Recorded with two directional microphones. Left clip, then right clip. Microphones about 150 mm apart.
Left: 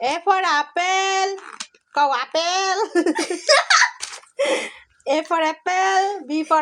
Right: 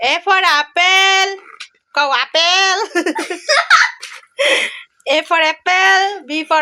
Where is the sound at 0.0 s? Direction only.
5° left (ahead or behind).